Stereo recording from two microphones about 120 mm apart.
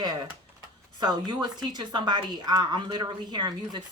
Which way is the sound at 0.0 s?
35° right (ahead or behind).